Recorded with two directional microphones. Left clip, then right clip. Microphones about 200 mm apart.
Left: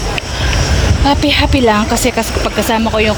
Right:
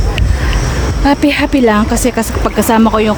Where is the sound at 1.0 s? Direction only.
30° right (ahead or behind).